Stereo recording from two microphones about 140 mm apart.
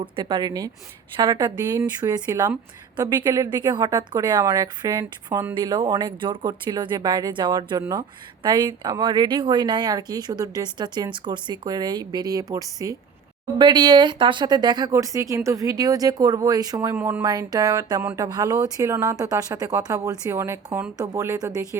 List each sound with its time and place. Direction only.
0.0 s a woman's voice: 30° right (ahead or behind); by 17.2 s 15° right (ahead or behind)
17.2 s a woman's voice: 25° right (ahead or behind)